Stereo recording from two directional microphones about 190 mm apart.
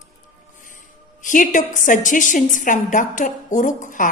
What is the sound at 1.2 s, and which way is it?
A woman's voice, 45° left (ahead or behind).